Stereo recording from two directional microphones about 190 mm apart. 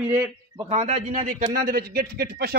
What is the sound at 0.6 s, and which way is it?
Speech, 35° right (ahead or behind).